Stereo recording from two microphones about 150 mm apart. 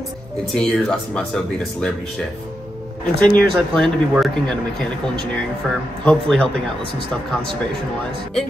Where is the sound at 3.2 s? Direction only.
5° left (ahead or behind).